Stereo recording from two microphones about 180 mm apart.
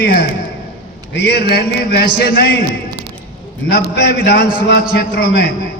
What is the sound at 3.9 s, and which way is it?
A man's voice, 65° left (ahead or behind).